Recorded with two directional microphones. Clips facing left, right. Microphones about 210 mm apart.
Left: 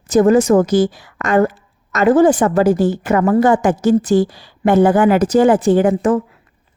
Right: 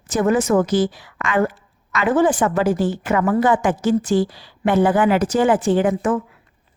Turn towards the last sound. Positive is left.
turn(degrees=40)  # may be behind; listen again after turning